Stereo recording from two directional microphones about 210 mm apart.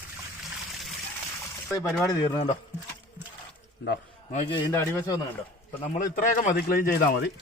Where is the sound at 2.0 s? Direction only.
20° left (ahead or behind).